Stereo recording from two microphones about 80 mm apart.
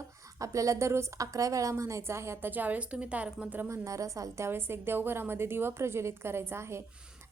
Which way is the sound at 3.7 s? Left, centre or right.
Right.